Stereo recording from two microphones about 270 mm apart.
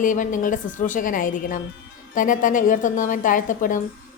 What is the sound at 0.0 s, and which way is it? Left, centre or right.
A woman's voice, left.